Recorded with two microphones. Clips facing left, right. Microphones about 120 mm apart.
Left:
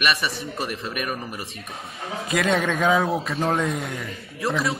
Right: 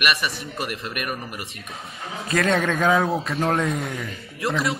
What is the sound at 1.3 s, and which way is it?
Speech, 30° left (ahead or behind).